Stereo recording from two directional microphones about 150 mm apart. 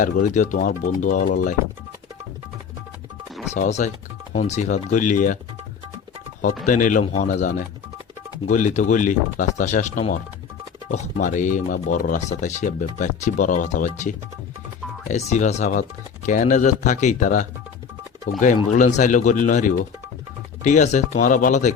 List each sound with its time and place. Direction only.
0.0 s speech: 55° left (ahead or behind)
3.5 s speech: 50° left (ahead or behind)
6.7 s speech: 60° left (ahead or behind)
15.1 s speech: 50° left (ahead or behind)